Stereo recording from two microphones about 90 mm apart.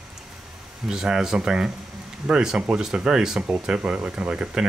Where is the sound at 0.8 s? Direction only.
5° right (ahead or behind).